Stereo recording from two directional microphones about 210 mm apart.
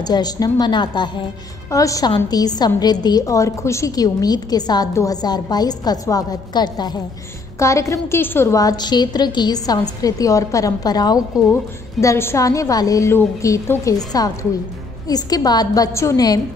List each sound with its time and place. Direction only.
0.0 s a woman's voice: 20° left (ahead or behind)